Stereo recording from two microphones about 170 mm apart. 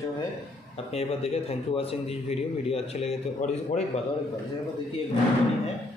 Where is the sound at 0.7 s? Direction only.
35° left (ahead or behind).